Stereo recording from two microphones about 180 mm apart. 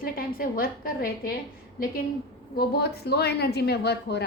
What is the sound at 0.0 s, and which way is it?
A woman's voice, 55° left (ahead or behind).